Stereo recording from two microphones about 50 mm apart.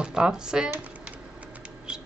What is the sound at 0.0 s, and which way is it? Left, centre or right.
Speech, centre.